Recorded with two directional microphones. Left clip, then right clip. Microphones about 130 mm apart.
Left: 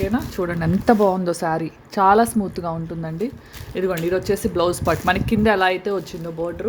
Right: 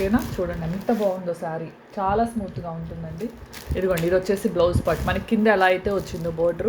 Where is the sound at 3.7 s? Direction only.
35° left (ahead or behind).